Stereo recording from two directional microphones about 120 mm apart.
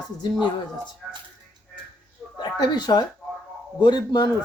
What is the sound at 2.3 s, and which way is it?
Speech, 35° left (ahead or behind).